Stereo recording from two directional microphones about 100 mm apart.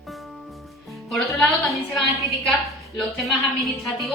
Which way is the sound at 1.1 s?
Centre (ahead or behind).